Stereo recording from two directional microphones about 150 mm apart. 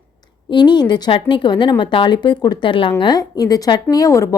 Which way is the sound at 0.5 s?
30° left (ahead or behind).